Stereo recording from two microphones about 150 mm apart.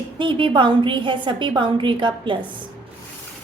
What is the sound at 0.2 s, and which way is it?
A woman's voice, 35° right (ahead or behind).